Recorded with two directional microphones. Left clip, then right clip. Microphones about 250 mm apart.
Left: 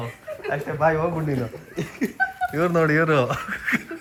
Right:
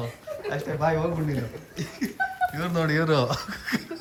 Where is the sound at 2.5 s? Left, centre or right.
Centre.